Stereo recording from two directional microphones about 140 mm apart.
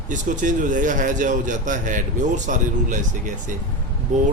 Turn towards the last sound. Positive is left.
turn(degrees=-60)  # may be behind; listen again after turning